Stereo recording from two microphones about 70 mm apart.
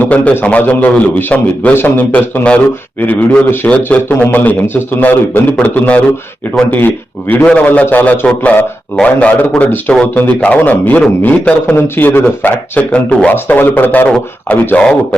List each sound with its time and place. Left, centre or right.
0.0 s a man's voice: left
7.4 s a man's voice: centre
13.3 s a man's voice: left